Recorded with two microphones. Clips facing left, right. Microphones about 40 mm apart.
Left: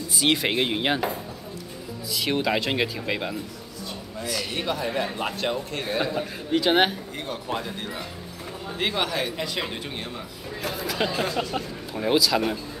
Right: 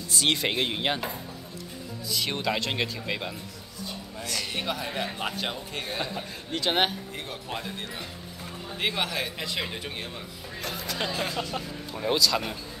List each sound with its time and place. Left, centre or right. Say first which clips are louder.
0.1 s a man's voice: left 3 dB; centre